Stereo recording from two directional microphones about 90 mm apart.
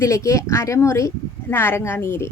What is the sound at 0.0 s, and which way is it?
Speech, 35° left (ahead or behind).